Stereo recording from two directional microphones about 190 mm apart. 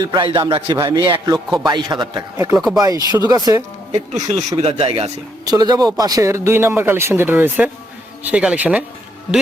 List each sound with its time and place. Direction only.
0.0 s speech: 25° right (ahead or behind)
4.1 s speech: 35° right (ahead or behind)
5.5 s speech: 20° right (ahead or behind)